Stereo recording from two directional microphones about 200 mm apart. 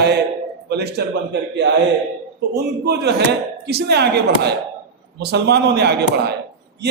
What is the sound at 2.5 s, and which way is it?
A man's voice, 55° right (ahead or behind).